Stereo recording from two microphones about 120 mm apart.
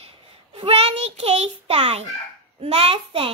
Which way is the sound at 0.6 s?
55° right (ahead or behind).